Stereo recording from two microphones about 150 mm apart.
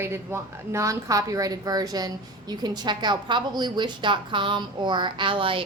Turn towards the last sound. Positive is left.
turn(degrees=-35)  # may be behind; listen again after turning